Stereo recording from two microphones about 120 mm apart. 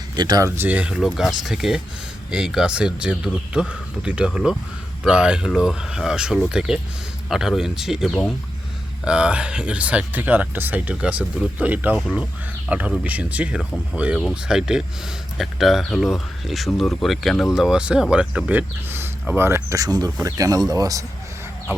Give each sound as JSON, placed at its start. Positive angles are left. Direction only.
{"t": 0.2, "sound": "speech", "side_deg": -30}